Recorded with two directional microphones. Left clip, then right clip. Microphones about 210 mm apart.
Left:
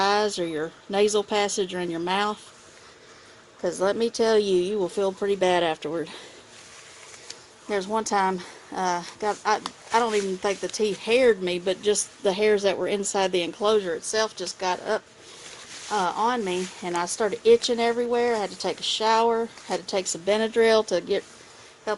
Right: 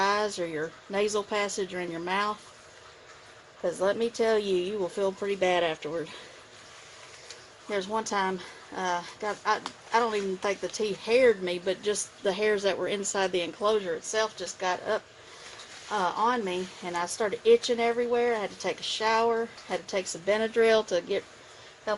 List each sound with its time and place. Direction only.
0.0 s speech: 35° left (ahead or behind)
3.6 s speech: 40° left (ahead or behind)
7.7 s speech: 40° left (ahead or behind)